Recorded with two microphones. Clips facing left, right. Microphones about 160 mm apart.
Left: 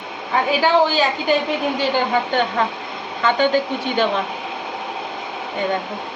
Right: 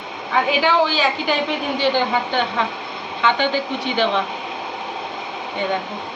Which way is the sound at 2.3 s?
40° left (ahead or behind).